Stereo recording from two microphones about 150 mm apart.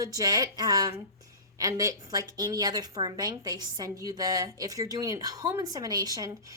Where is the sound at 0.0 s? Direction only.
25° right (ahead or behind).